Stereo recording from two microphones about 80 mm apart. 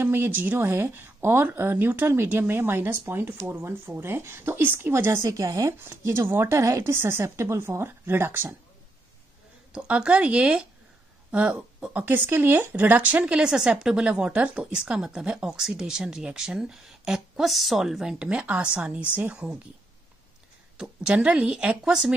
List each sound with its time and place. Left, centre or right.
0.0 s speech: right
9.7 s speech: centre
12.0 s speech: right
20.7 s speech: centre